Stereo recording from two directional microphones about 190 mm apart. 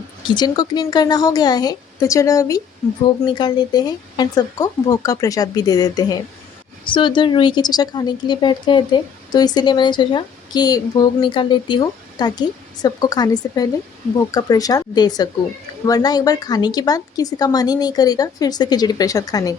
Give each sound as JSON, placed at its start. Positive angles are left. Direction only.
{"t": 0.3, "sound": "speech", "side_deg": 20}